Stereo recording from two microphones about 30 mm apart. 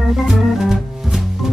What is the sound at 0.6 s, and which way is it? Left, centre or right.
Music, centre.